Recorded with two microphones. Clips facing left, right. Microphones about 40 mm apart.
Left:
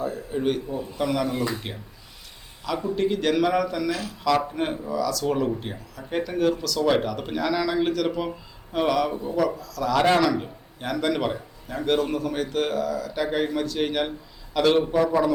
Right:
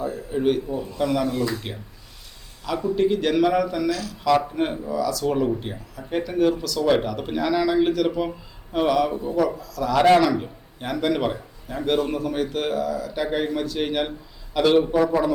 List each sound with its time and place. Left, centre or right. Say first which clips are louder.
0.0 s a man's voice: right 3 dB; centre
1.3 s speech: right 2 dB; centre
2.6 s a man's voice: right 3 dB; centre
3.8 s speech: right 2 dB; left
4.2 s a man's voice: right 3 dB; centre